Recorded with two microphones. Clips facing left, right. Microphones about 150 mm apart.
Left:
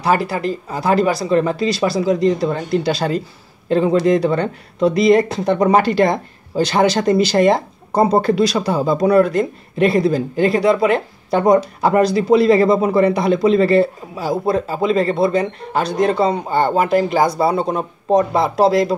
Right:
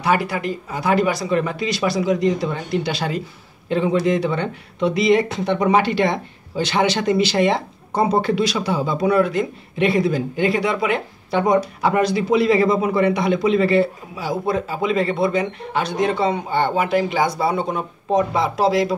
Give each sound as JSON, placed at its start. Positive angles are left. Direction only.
{"t": 0.0, "sound": "speech", "side_deg": 35}